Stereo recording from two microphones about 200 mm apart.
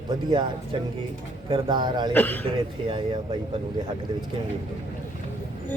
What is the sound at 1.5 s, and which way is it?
Speech, 20° right (ahead or behind).